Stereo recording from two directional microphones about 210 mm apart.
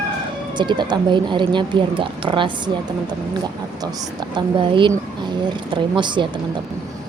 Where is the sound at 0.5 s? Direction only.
20° right (ahead or behind).